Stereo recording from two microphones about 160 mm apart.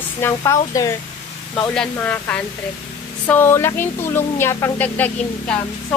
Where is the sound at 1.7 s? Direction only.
5° left (ahead or behind).